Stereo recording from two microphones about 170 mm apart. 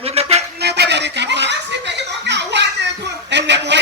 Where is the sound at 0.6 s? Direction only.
80° right.